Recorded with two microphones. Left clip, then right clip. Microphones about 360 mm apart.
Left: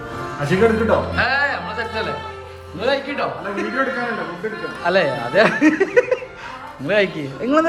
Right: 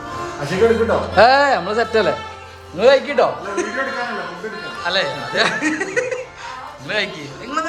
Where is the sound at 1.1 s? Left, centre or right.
Centre.